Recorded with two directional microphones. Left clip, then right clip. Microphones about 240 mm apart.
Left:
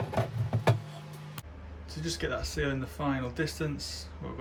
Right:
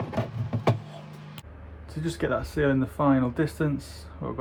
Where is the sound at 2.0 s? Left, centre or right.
Centre.